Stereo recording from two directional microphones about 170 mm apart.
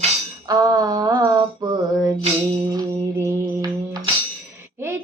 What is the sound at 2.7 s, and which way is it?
Music, 15° right (ahead or behind).